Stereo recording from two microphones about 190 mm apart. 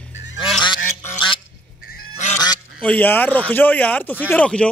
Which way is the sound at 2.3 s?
20° left (ahead or behind).